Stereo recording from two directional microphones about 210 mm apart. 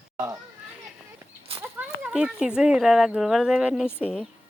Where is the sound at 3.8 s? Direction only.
10° left (ahead or behind).